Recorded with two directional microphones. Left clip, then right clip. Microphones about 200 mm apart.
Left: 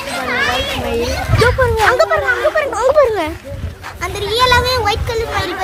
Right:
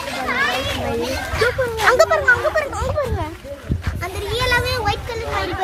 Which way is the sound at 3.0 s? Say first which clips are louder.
Left 12 dB; 55° left (ahead or behind).